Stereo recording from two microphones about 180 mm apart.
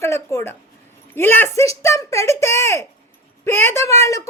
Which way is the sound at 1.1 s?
10° left (ahead or behind).